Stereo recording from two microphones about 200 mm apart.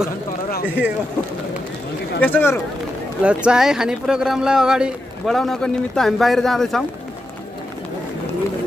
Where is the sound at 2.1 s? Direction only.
10° left (ahead or behind).